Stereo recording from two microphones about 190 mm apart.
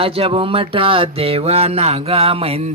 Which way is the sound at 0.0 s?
30° right (ahead or behind).